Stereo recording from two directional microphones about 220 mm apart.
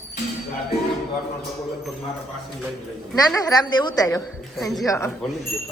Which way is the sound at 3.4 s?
15° left (ahead or behind).